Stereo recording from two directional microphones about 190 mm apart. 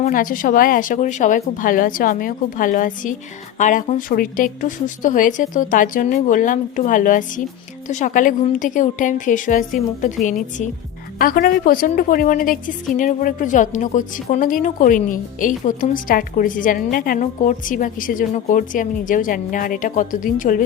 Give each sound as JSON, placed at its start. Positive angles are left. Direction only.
{"t": 0.0, "sound": "a woman's voice", "side_deg": 45}
{"t": 11.2, "sound": "a woman's voice", "side_deg": 50}